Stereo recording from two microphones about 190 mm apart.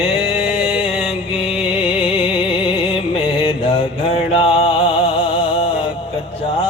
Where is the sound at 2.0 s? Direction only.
30° left (ahead or behind).